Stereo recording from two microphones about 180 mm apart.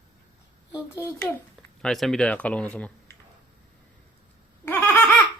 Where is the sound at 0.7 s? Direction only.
15° left (ahead or behind).